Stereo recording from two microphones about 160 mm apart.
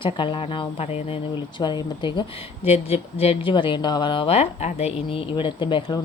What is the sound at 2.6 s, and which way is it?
Speech, 40° left (ahead or behind).